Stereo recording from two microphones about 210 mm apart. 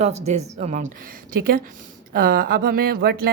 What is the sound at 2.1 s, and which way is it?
Speech, 45° right (ahead or behind).